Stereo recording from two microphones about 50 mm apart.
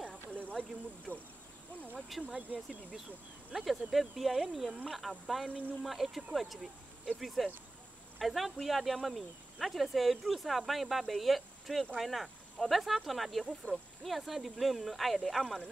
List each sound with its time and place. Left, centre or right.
0.3 s a sound: right
1.1 s speech: right
2.0 s speech: centre
2.3 s speech: centre
3.5 s speech: centre